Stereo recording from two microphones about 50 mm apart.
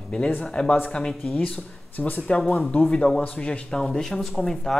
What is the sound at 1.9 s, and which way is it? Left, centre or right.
Speech, left.